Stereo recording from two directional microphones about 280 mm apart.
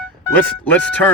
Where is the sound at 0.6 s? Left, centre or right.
Centre.